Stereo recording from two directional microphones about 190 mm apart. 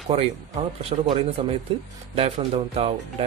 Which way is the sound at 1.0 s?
30° right (ahead or behind).